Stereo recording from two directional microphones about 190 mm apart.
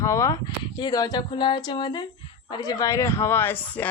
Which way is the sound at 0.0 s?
15° left (ahead or behind).